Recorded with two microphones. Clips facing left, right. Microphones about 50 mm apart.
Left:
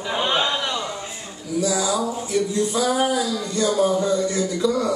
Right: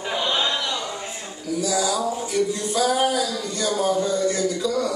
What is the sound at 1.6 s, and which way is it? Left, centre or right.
Speech, left.